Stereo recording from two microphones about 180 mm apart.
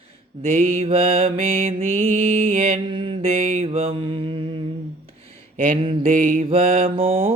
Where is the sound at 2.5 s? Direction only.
30° right (ahead or behind).